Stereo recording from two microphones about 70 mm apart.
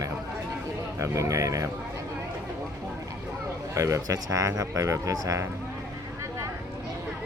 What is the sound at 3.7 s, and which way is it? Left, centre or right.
Speech, right.